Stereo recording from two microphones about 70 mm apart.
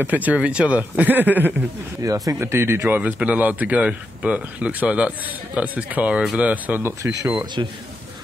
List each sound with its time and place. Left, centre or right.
0.0 s speech: right
2.0 s speech: right
2.3 s speech: right
3.3 s speech: right
6.8 s speech: right
7.6 s a man's voice: right